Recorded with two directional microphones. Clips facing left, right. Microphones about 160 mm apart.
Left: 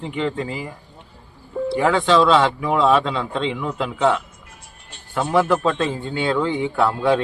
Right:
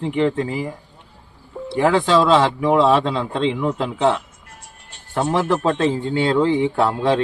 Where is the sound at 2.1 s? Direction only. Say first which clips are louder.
Even; 35° right (ahead or behind).